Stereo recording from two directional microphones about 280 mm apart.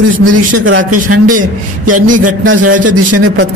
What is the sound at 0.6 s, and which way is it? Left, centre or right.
Speech, right.